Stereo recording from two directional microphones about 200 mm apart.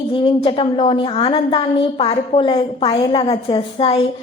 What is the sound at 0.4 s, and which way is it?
A woman's voice, 25° left (ahead or behind).